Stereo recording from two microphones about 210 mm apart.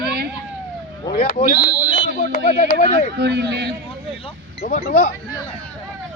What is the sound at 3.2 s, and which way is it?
Speech, 55° right (ahead or behind).